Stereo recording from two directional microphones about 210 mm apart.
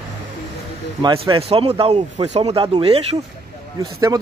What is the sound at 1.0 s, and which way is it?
Speech, 20° right (ahead or behind).